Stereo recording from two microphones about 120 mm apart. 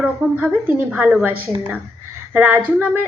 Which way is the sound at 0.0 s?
10° right (ahead or behind).